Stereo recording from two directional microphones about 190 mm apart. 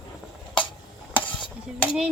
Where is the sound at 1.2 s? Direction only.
25° left (ahead or behind).